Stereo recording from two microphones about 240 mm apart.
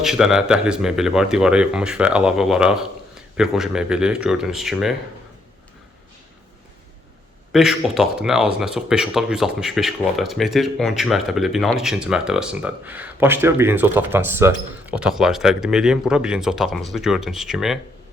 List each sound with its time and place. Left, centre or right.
0.0 s speech: centre
7.5 s speech: centre